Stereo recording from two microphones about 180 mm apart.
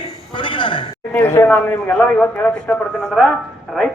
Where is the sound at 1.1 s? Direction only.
10° left (ahead or behind).